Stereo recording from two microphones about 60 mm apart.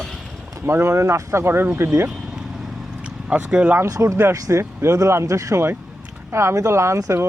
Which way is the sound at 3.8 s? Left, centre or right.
Right.